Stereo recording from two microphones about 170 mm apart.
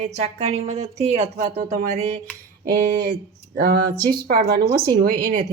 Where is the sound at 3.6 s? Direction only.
60° right (ahead or behind).